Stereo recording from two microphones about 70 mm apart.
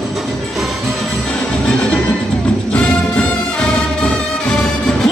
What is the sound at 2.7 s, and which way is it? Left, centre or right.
Music, centre.